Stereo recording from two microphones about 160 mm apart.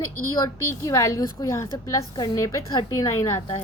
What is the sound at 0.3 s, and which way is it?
A woman's voice, 20° left (ahead or behind).